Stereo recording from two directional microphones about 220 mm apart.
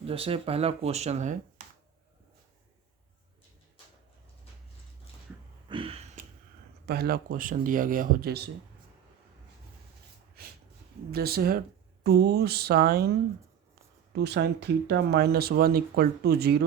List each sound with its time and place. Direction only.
0.0 s speech: 25° right (ahead or behind)
5.6 s a sound: 25° right (ahead or behind)
6.8 s speech: 45° right (ahead or behind)
11.1 s speech: 45° right (ahead or behind)